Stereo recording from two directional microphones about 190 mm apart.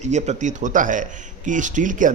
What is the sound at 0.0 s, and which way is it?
A man's voice, 35° right (ahead or behind).